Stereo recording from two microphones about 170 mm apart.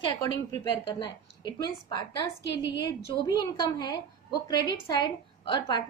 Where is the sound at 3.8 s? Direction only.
25° left (ahead or behind).